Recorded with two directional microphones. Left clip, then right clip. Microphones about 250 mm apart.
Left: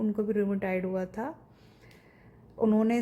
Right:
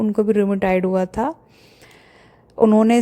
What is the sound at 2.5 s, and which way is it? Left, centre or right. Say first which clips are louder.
Speech: right 12 dB; right.